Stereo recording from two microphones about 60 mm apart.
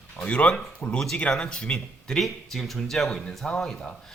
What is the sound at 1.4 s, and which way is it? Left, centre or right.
Speech, centre.